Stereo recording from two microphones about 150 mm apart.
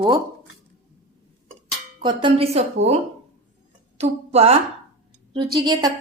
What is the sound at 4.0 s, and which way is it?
Speech, 40° right (ahead or behind).